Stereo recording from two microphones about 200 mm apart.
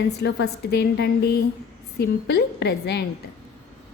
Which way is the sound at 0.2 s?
55° left (ahead or behind).